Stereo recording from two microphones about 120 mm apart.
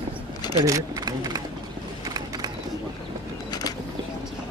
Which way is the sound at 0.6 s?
30° right (ahead or behind).